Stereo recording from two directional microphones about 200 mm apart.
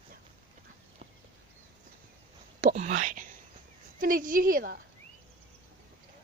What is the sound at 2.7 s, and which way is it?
Whispering, 40° right (ahead or behind).